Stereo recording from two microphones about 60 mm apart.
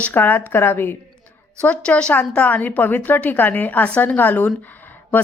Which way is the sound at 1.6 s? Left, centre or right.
Centre.